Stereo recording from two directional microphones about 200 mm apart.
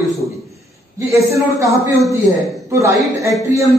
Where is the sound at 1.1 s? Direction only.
15° right (ahead or behind).